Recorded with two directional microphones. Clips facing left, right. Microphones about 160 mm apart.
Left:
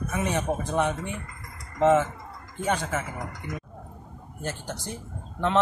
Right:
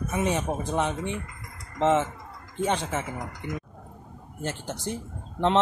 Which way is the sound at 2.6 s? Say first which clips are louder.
Right 1 dB; 25° right (ahead or behind).